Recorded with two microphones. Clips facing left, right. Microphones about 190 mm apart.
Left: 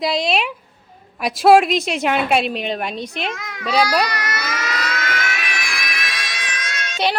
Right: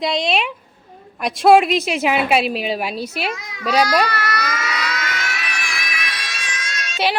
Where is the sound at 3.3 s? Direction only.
50° left (ahead or behind).